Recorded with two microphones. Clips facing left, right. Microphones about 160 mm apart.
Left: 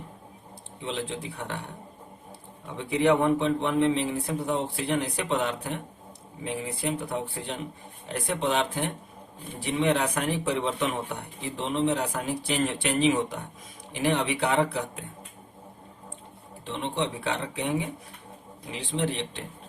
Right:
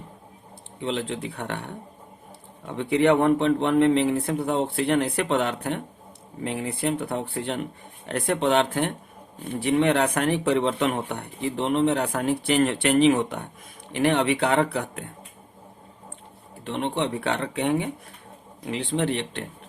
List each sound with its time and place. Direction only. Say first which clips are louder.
0.8 s speech: right 5 dB; 60° right (ahead or behind)
16.6 s speech: right 4 dB; 60° right (ahead or behind)